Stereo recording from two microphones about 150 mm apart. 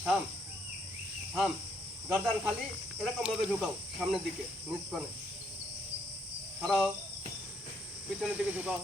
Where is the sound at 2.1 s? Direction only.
Centre (ahead or behind).